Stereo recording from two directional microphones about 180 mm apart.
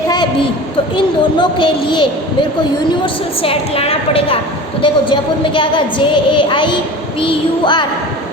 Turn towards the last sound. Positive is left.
turn(degrees=25)  # may be behind; listen again after turning